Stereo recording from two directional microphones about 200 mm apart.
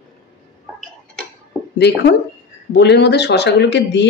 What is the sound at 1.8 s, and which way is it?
Speech, 55° left (ahead or behind).